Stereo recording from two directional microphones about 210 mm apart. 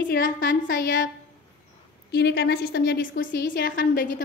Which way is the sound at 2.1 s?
50° left (ahead or behind).